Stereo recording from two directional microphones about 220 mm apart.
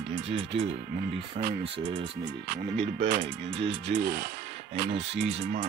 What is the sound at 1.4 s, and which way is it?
Speech, 30° right (ahead or behind).